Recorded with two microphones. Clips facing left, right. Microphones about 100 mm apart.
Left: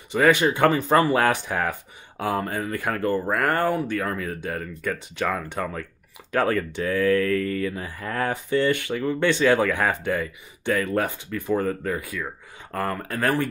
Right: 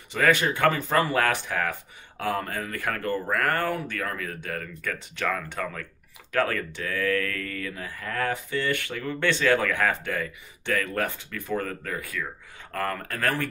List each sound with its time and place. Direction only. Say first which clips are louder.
0.1 s speech: left 4 dB; 20° left (ahead or behind)